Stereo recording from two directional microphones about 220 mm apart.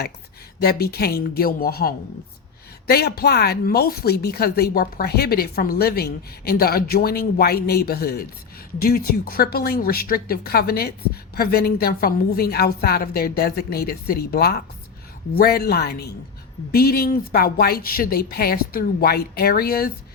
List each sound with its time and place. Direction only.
0.6 s a woman's voice: 45° left (ahead or behind)